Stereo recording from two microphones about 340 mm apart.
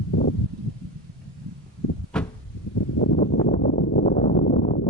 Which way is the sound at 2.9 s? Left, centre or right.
Left.